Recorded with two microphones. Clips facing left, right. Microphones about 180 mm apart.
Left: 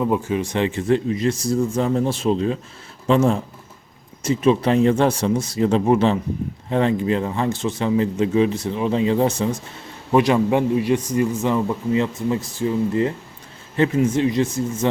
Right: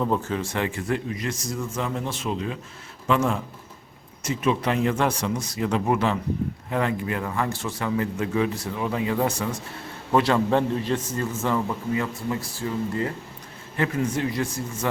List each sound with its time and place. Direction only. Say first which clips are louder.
0.0 s a man's voice: left 4 dB; 10° left (ahead or behind)